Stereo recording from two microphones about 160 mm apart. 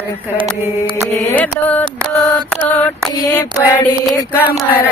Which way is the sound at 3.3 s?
15° left (ahead or behind).